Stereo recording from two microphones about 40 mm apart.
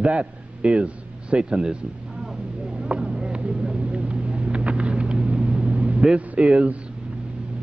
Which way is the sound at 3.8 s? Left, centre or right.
Right.